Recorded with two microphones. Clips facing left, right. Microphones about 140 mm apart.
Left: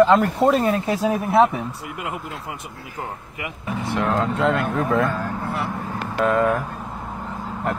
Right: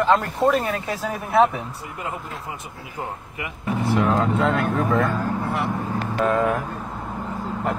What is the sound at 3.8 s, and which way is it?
Speech, centre (ahead or behind).